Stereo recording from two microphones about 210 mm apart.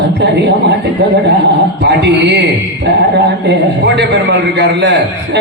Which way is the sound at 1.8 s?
55° right (ahead or behind).